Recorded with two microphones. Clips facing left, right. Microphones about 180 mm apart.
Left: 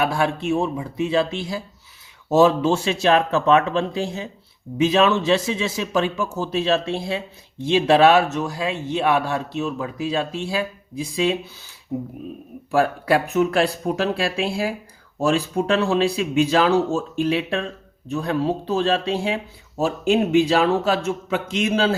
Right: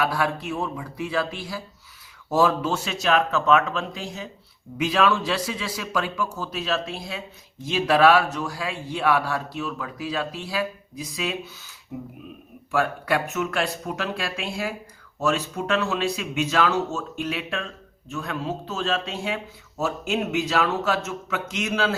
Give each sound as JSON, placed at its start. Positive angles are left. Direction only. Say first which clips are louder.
{"t": 0.0, "sound": "a man's voice", "louder": "left 3 dB", "side_deg": 25}